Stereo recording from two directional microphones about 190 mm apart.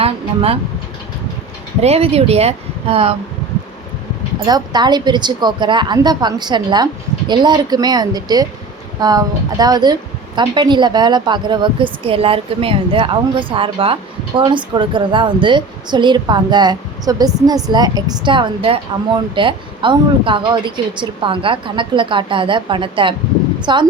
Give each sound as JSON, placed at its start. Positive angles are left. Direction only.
{"t": 0.0, "sound": "speech", "side_deg": -30}
{"t": 1.8, "sound": "speech", "side_deg": -35}
{"t": 4.4, "sound": "a woman's voice", "side_deg": -20}